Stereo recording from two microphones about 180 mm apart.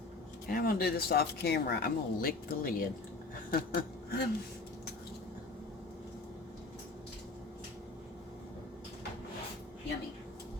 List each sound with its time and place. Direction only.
0.4 s speech: 55° left (ahead or behind)